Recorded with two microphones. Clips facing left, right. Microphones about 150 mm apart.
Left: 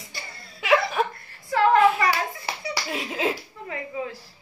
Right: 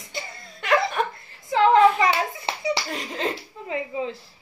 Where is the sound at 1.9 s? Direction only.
20° right (ahead or behind).